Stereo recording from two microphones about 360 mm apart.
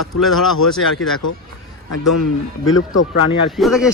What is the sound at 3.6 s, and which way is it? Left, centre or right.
Speech, centre.